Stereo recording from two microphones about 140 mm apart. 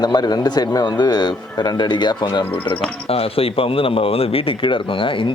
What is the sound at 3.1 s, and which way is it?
Speech, 45° left (ahead or behind).